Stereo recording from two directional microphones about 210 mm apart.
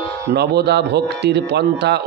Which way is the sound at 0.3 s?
50° right (ahead or behind).